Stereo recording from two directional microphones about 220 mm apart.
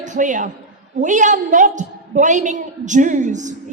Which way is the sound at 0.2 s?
35° right (ahead or behind).